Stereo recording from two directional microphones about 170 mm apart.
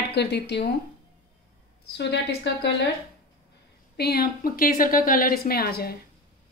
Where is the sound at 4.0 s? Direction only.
65° left (ahead or behind).